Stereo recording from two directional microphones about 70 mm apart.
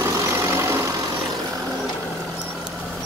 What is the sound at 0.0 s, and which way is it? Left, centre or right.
Vehicle, right.